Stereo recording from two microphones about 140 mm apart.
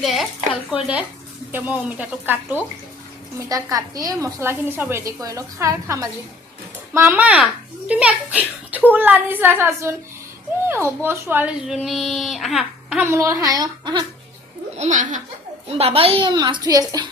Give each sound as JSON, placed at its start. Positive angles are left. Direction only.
{"t": 0.0, "sound": "a child's voice", "side_deg": 0}
{"t": 3.5, "sound": "a woman's voice", "side_deg": -25}
{"t": 11.0, "sound": "a child's voice", "side_deg": -15}
{"t": 11.6, "sound": "speech", "side_deg": -5}
{"t": 13.1, "sound": "a woman's voice", "side_deg": -20}
{"t": 14.8, "sound": "laughter", "side_deg": -60}
{"t": 15.6, "sound": "a woman's voice", "side_deg": -45}